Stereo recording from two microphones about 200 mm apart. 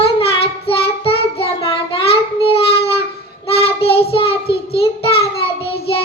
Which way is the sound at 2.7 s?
30° left (ahead or behind).